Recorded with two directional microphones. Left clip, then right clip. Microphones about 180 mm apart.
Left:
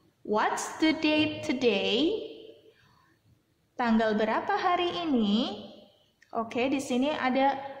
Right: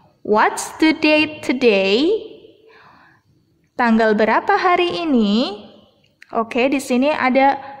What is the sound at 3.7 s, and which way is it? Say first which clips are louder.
A woman's voice: right 11 dB; 45° right (ahead or behind).